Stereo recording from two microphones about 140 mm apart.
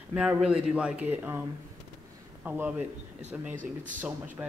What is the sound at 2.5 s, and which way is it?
Speech, 15° right (ahead or behind).